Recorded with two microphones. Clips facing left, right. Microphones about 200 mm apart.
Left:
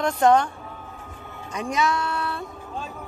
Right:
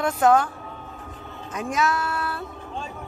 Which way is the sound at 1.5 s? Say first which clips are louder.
Even; 5° right (ahead or behind).